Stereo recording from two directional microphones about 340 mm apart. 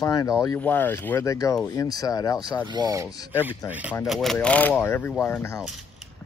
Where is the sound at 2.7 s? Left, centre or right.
Centre.